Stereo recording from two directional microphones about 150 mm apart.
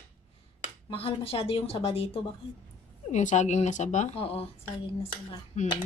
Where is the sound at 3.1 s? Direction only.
55° left (ahead or behind); by 4.9 s 40° left (ahead or behind).